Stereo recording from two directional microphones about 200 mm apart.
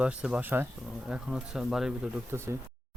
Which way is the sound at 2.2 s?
15° right (ahead or behind).